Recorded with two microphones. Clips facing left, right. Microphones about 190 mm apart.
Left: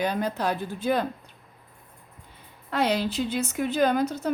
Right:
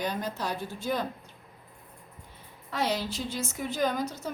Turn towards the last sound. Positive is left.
turn(degrees=65)  # may be behind; listen again after turning